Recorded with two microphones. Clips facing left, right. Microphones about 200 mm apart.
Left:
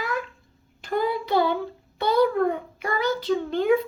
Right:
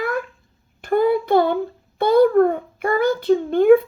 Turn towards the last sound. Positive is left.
turn(degrees=-55)  # may be behind; listen again after turning